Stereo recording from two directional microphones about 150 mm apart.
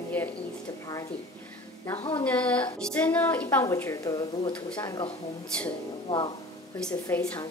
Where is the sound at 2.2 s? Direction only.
10° left (ahead or behind); by 5.1 s 30° left (ahead or behind).